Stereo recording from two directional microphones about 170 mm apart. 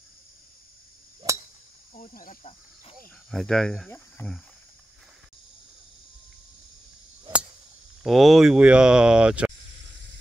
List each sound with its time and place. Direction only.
1.2 s a sound: 25° right (ahead or behind)
2.0 s speech: 55° left (ahead or behind)
3.3 s speech: 5° left (ahead or behind)
8.0 s speech: centre (ahead or behind)